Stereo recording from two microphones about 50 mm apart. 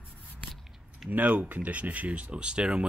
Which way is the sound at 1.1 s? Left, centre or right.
Right.